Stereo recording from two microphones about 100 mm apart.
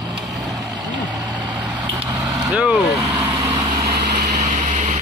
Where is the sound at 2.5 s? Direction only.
10° right (ahead or behind).